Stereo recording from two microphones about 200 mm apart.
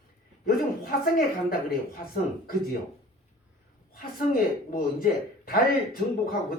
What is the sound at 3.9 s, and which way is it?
Speech, 45° left (ahead or behind).